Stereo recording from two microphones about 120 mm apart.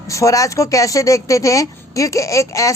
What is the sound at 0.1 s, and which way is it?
A woman's voice, 25° left (ahead or behind).